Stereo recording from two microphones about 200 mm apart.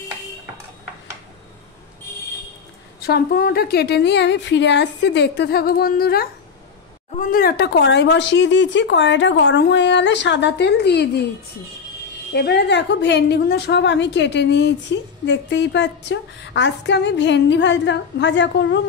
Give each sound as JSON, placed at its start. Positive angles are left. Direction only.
{"t": 3.0, "sound": "a woman's voice", "side_deg": 50}
{"t": 12.4, "sound": "a woman's voice", "side_deg": 55}